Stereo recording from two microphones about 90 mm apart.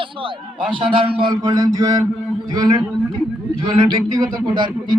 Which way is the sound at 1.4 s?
45° right (ahead or behind).